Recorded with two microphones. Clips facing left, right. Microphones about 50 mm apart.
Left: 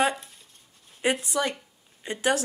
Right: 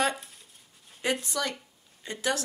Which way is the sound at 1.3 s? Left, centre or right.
Left.